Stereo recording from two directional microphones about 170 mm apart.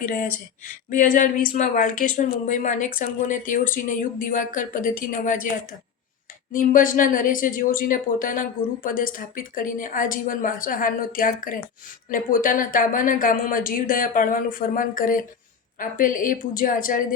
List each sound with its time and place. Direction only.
0.0 s speech: 55° left (ahead or behind)
6.5 s speech: 50° left (ahead or behind)